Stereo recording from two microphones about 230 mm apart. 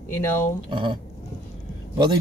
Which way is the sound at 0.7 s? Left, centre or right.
Right.